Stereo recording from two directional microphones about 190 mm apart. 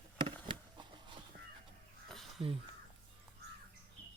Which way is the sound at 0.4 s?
25° right (ahead or behind).